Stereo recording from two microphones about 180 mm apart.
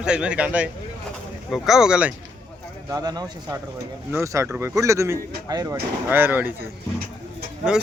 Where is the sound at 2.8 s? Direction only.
20° right (ahead or behind).